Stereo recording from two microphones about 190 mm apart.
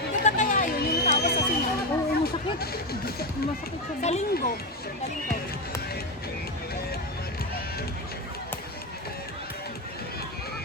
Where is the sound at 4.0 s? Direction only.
35° left (ahead or behind).